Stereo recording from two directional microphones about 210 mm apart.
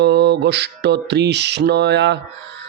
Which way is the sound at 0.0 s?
55° right (ahead or behind).